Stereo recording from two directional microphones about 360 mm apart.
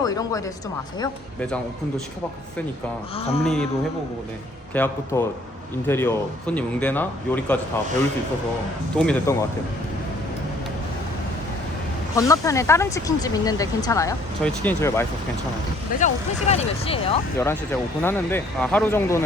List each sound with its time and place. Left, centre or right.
0.0 s speech: centre
3.2 s speech: centre
3.4 s a man's voice: centre
4.7 s a man's voice: centre
9.0 s a man's voice: centre
12.1 s speech: centre
16.0 s speech: centre